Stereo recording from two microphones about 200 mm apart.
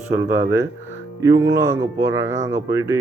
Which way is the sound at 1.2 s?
15° right (ahead or behind).